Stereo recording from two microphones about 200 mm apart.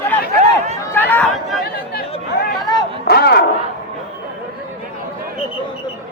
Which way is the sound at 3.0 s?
55° left (ahead or behind).